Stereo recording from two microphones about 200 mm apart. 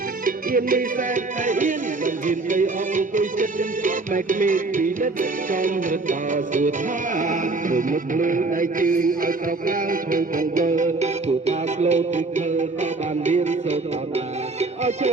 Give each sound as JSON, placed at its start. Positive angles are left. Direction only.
{"t": 0.3, "sound": "music", "side_deg": -45}